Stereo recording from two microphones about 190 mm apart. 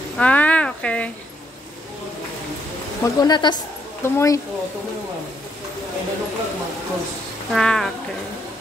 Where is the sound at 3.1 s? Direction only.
20° left (ahead or behind).